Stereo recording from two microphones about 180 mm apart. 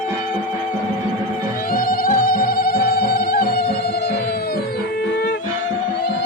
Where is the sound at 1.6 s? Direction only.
55° left (ahead or behind).